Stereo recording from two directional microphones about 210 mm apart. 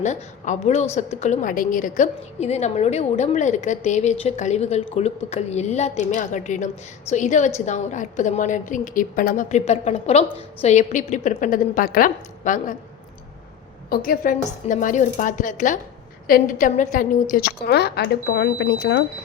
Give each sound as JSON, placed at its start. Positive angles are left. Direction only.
{"t": 0.0, "sound": "a woman's voice", "side_deg": 35}
{"t": 13.9, "sound": "a woman's voice", "side_deg": 45}